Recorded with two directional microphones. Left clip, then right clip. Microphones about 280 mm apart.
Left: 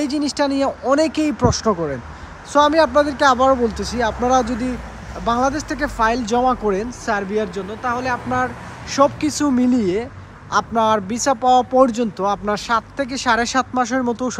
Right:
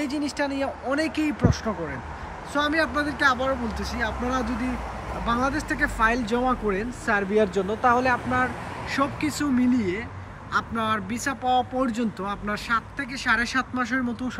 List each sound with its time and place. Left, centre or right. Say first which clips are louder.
0.0 s speech: left 7 dB; centre
1.7 s speech: left 11 dB; right
2.5 s speech: left 10 dB; centre